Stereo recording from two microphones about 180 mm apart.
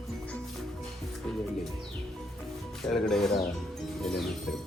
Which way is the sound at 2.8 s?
Centre (ahead or behind).